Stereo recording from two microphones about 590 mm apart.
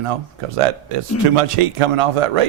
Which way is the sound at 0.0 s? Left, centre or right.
Right.